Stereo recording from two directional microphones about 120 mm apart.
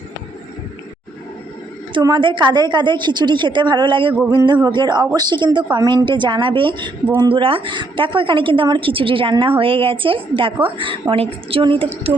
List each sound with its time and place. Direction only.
1.9 s a woman's voice: 40° right (ahead or behind)